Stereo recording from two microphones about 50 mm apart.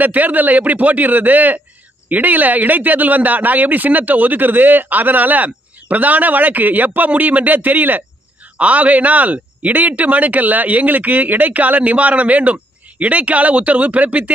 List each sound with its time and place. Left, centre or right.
0.0 s speech: right